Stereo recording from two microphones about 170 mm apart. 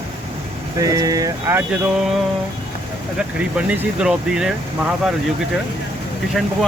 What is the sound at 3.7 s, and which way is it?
Speech, 5° right (ahead or behind).